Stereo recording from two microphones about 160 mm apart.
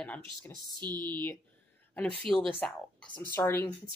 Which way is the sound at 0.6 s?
25° right (ahead or behind).